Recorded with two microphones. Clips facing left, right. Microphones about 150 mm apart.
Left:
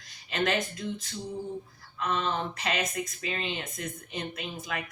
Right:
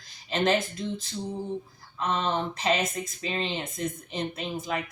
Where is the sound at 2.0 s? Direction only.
25° right (ahead or behind).